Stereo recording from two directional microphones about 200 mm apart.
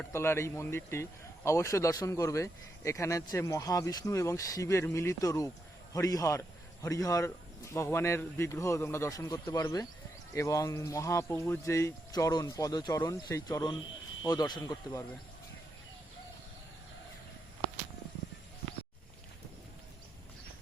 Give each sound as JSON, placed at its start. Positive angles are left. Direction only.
{"t": 0.0, "sound": "speech", "side_deg": 10}